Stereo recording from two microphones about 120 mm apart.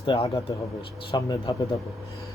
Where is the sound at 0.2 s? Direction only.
60° left (ahead or behind).